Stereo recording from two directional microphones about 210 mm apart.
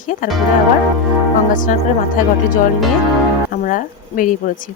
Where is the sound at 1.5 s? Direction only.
40° left (ahead or behind).